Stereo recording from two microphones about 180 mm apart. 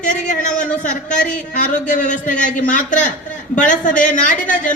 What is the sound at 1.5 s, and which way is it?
A man's voice, 45° left (ahead or behind).